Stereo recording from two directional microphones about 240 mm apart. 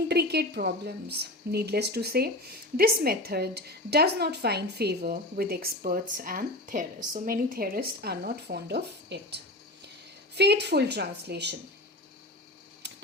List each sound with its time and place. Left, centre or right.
0.1 s a woman's voice: right
12.8 s tick-tock: right